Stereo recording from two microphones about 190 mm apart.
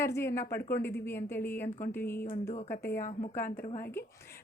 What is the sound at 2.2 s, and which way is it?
Speech, 35° left (ahead or behind).